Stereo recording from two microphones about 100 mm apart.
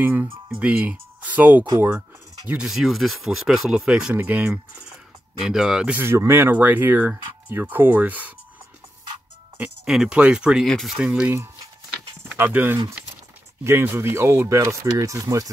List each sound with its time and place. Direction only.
0.0 s speech: 20° right (ahead or behind)
5.9 s speech: 25° right (ahead or behind)
9.6 s speech: 5° right (ahead or behind)
11.0 s speech: 10° right (ahead or behind)
12.4 s speech: 20° right (ahead or behind); by 15.4 s 35° right (ahead or behind)